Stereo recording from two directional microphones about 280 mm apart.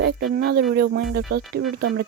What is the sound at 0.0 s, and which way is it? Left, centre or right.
Speech, right.